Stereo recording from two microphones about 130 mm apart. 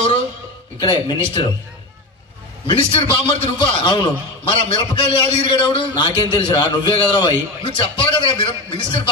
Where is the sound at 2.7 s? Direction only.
45° left (ahead or behind).